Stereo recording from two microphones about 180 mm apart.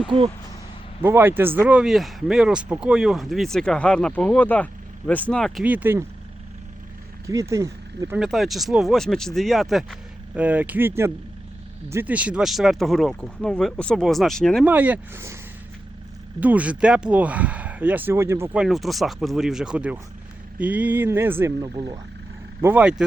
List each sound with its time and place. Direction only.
1.0 s speech: 10° right (ahead or behind); by 5.6 s 5° left (ahead or behind)
5.6 s speech: 10° right (ahead or behind)
7.3 s speech: 15° right (ahead or behind)
8.2 s speech: centre (ahead or behind)
14.6 s speech: 10° right (ahead or behind)
16.4 s speech: 10° right (ahead or behind); by 22.0 s 25° right (ahead or behind)
22.6 s speech: 10° right (ahead or behind)